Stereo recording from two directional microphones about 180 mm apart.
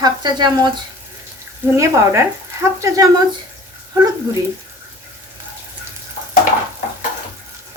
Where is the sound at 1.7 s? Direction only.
15° right (ahead or behind).